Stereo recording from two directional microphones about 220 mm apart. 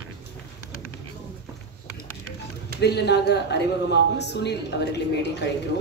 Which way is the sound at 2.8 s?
50° left (ahead or behind).